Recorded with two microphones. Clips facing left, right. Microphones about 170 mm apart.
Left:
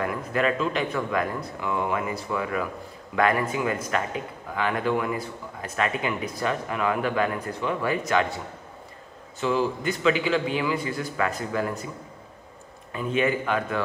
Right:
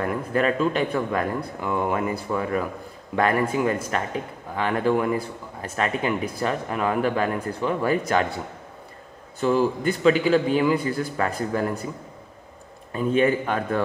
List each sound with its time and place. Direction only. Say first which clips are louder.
0.0 s a man's voice: right 2 dB; 35° right (ahead or behind)
9.4 s speech: right 4 dB; 40° right (ahead or behind)
12.9 s speech: right 4 dB; 40° right (ahead or behind)